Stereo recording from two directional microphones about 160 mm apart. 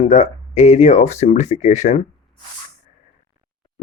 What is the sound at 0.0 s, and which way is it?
Speech, 50° left (ahead or behind).